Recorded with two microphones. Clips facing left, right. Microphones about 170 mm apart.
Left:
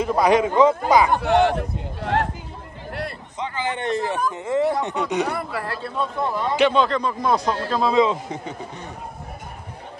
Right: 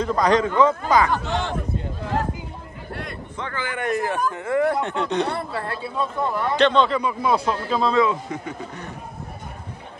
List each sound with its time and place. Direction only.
0.0 s speech: 10° left (ahead or behind)
1.1 s a man's voice: 65° left (ahead or behind)
3.3 s speech: 15° left (ahead or behind)
5.3 s speech: 25° right (ahead or behind)
5.8 s speech: 5° right (ahead or behind)
6.1 s speech: 15° left (ahead or behind)
6.9 s speech: 10° right (ahead or behind)
7.9 s speech: 20° left (ahead or behind)